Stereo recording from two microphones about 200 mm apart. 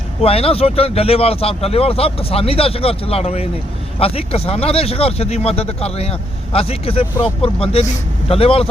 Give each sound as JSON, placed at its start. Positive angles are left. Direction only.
{"t": 0.2, "sound": "speech", "side_deg": 30}